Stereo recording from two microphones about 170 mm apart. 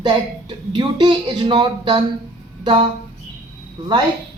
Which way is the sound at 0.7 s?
30° right (ahead or behind).